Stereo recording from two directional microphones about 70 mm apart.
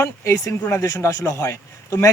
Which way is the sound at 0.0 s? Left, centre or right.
Left.